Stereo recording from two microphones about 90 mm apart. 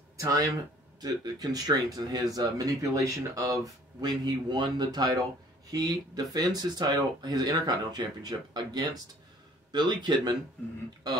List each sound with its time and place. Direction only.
0.2 s speech: 40° right (ahead or behind)